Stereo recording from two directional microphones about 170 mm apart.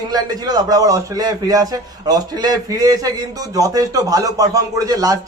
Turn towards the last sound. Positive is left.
turn(degrees=-20)  # may be behind; listen again after turning